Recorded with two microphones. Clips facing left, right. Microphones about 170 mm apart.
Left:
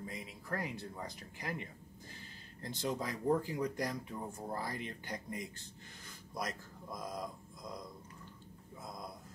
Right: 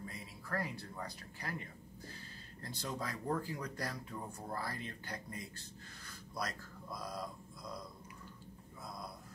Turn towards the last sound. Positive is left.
turn(degrees=20)  # may be behind; listen again after turning